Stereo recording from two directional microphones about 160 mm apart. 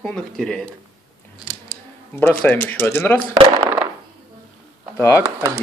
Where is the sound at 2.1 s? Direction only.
10° left (ahead or behind).